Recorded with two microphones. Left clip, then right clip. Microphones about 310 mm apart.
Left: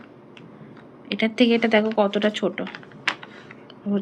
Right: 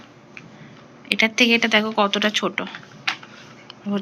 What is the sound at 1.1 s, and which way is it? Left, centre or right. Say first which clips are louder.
Speech: right 4 dB; centre.